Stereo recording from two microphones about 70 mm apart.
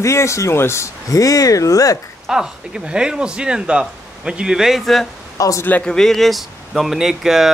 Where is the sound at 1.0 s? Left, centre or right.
Left.